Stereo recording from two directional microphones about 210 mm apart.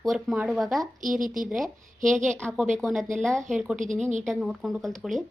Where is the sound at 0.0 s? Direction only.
Centre (ahead or behind).